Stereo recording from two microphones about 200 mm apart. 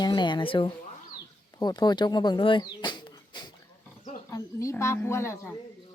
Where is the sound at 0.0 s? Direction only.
20° left (ahead or behind).